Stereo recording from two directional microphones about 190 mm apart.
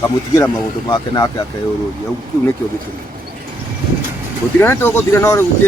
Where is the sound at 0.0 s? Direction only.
15° left (ahead or behind).